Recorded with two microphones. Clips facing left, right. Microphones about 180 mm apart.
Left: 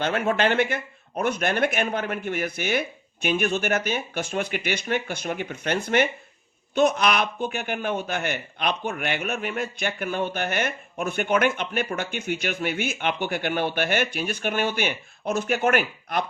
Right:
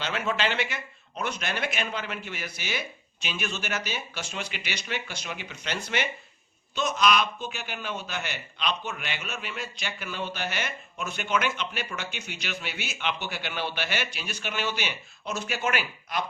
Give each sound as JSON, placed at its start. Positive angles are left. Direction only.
{"t": 0.0, "sound": "a man's voice", "side_deg": 55}